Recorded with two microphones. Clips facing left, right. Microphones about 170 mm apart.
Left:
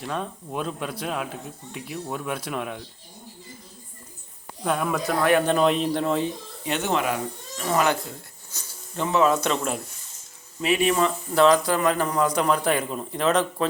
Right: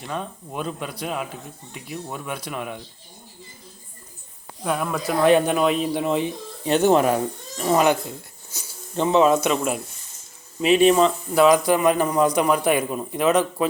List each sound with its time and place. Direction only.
0.0 s speech: centre (ahead or behind)
4.6 s a man's voice: centre (ahead or behind); by 6.3 s 15° right (ahead or behind)
6.7 s speech: 35° right (ahead or behind)
7.6 s speech: 20° right (ahead or behind)
8.5 s insect: 10° right (ahead or behind)
9.0 s a man's voice: 20° right (ahead or behind)
10.6 s a man's voice: 25° right (ahead or behind)